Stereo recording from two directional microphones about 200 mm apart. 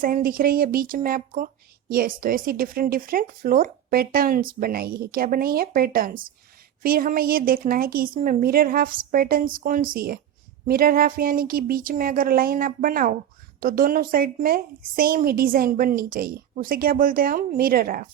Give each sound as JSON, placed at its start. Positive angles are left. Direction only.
{"t": 0.0, "sound": "a woman's voice", "side_deg": -45}